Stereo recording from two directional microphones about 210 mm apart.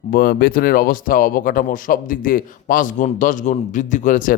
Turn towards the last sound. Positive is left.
turn(degrees=35)  # may be behind; listen again after turning